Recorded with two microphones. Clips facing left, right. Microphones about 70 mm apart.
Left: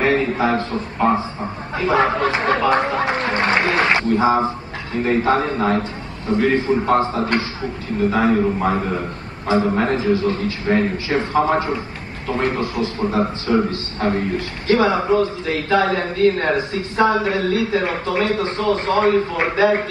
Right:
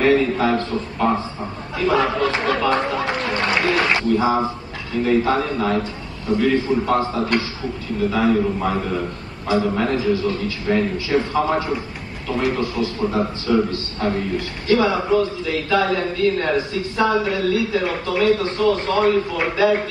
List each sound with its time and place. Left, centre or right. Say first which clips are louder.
0.0 s a man's voice: right 1 dB; left